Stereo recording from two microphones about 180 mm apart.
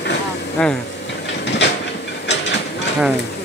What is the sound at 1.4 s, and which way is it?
Train, 75° left (ahead or behind).